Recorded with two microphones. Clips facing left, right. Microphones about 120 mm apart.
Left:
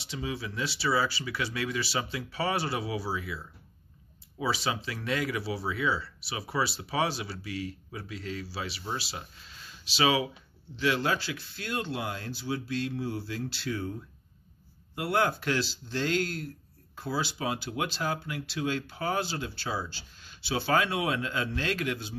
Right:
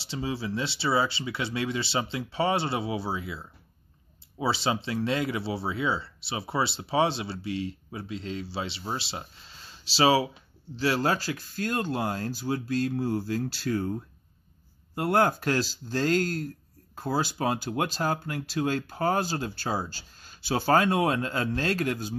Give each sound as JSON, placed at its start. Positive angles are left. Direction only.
{"t": 0.0, "sound": "speech", "side_deg": -30}